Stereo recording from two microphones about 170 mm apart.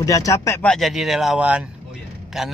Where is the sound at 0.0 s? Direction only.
20° left (ahead or behind).